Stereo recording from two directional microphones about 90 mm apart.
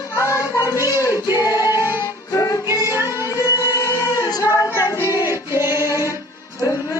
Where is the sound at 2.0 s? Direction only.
40° left (ahead or behind).